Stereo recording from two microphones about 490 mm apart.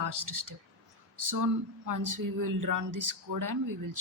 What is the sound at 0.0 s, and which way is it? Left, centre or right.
A woman's voice, right.